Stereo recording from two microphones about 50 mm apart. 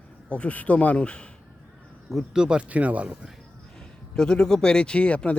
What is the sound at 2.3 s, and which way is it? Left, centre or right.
Speech, centre.